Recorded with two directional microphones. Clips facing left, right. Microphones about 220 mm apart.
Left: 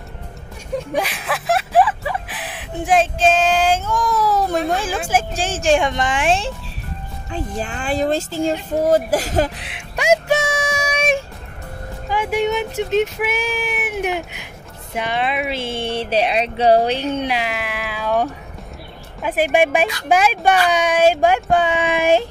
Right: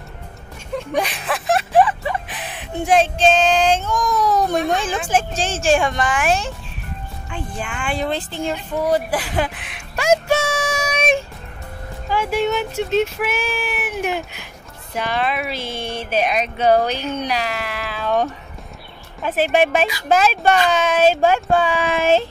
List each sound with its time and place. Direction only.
0.9 s speech: 5° left (ahead or behind); by 6.5 s 30° left (ahead or behind)
7.2 s speech: 40° left (ahead or behind)
9.9 s a sound: 15° left (ahead or behind)
12.1 s speech: 15° left (ahead or behind)